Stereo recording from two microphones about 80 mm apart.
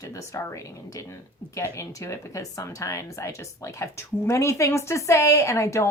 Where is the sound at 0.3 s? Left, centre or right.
Left.